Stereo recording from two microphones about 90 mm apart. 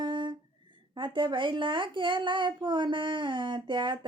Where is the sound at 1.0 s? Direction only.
65° right (ahead or behind).